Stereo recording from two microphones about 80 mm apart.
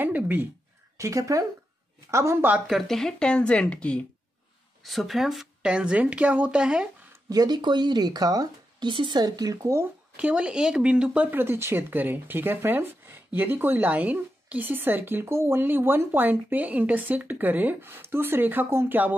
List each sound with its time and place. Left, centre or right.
0.0 s a sound: right
0.9 s speech: right
2.9 s speech: centre
4.8 s a woman's voice: centre
7.2 s speech: right
8.8 s speech: right
10.1 s a woman's voice: centre
11.2 s speech: right